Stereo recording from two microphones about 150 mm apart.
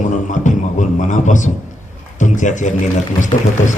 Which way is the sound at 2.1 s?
55° left (ahead or behind).